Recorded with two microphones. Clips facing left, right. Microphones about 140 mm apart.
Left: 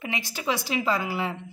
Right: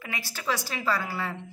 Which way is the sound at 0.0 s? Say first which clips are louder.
Left 4 dB; 20° left (ahead or behind).